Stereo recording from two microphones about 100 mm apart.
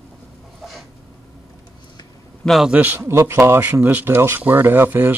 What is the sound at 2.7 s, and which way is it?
Speech, 15° right (ahead or behind).